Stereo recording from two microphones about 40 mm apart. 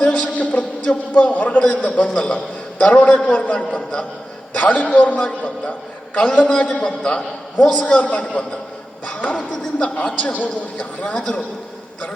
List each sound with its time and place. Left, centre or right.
0.0 s a man's voice: left
4.6 s a man's voice: left